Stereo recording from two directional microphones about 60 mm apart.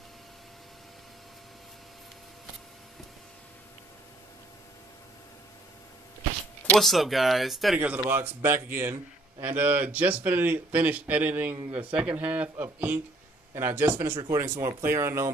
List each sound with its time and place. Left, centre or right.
6.8 s speech: centre
7.7 s speech: right
8.1 s speech: right
8.5 s speech: right
9.4 s speech: right
13.6 s speech: right